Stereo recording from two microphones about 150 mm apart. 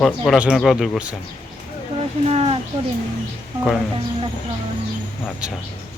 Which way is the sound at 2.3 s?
40° right (ahead or behind).